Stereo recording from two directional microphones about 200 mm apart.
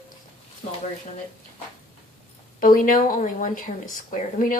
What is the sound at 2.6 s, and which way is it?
Speech, 45° left (ahead or behind).